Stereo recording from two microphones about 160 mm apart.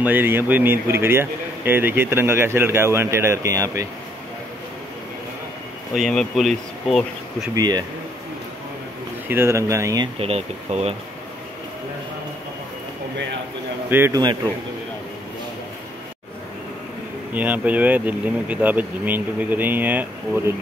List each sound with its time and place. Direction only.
0.0 s speech: 10° right (ahead or behind)
5.9 s speech: centre (ahead or behind)
7.5 s speech: 25° right (ahead or behind)
9.3 s speech: 15° right (ahead or behind)
10.1 s speech: 40° right (ahead or behind)
13.8 s speech: 15° right (ahead or behind)
17.3 s speech: 10° right (ahead or behind)